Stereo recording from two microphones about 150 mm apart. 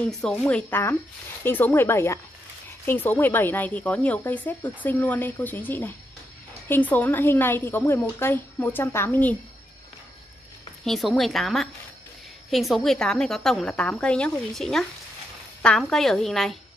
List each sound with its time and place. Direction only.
0.2 s a woman's voice: 10° left (ahead or behind)
10.8 s a woman's voice: centre (ahead or behind)